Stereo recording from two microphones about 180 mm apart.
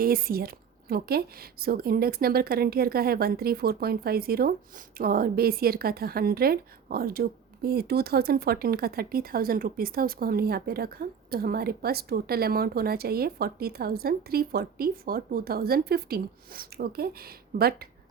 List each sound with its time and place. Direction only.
0.0 s a woman's voice: 55° right (ahead or behind)